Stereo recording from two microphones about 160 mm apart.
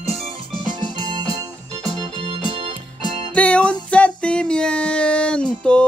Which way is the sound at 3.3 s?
10° left (ahead or behind).